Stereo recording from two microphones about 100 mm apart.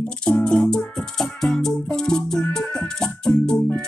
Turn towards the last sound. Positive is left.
turn(degrees=10)  # may be behind; listen again after turning